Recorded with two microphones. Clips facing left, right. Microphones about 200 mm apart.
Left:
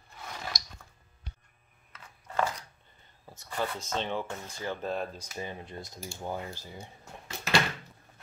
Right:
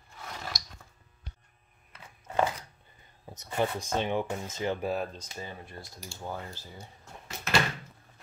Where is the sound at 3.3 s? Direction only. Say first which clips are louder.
Right 4 dB; 20° right (ahead or behind).